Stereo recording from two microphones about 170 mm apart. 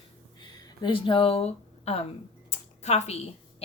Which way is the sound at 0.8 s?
30° left (ahead or behind).